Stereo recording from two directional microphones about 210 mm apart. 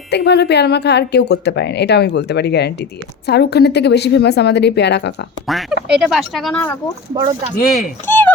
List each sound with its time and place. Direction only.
0.1 s speech: 55° left (ahead or behind)
5.5 s speech: centre (ahead or behind)
7.1 s speech: 25° right (ahead or behind)
7.5 s speech: 40° left (ahead or behind)
8.0 s speech: 10° left (ahead or behind)